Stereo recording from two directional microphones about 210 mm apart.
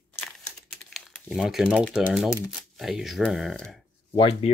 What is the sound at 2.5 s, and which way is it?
Speech, centre (ahead or behind).